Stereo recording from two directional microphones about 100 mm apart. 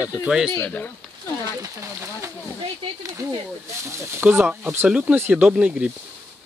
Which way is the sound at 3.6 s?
25° right (ahead or behind).